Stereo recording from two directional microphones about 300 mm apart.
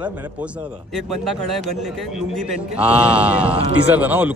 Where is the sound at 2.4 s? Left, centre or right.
Centre.